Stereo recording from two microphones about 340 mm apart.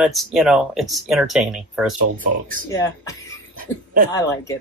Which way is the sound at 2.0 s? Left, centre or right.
Right.